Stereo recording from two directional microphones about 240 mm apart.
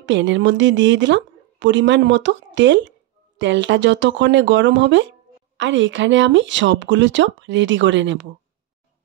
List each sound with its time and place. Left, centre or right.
0.0 s a woman's voice: right